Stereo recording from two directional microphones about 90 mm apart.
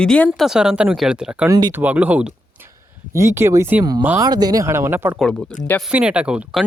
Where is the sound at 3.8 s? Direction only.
45° right (ahead or behind).